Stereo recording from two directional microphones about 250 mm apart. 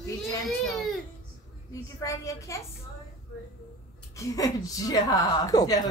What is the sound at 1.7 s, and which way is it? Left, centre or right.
Speech, centre.